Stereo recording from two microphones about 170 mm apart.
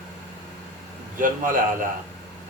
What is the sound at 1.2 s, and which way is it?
Speech, 55° right (ahead or behind).